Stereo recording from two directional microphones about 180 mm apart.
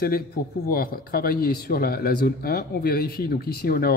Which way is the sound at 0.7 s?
55° left (ahead or behind).